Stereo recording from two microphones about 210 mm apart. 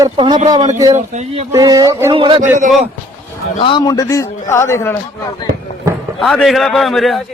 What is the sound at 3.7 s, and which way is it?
A man's voice, 20° left (ahead or behind).